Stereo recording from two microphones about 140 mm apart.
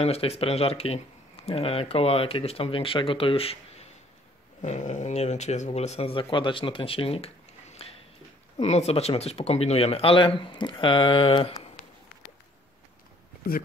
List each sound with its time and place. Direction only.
0.0 s speech: 45° left (ahead or behind)
4.6 s speech: 55° left (ahead or behind); by 11.7 s 40° left (ahead or behind)